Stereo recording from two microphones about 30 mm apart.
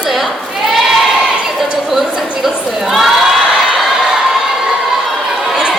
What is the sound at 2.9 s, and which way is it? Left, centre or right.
Crowd, centre.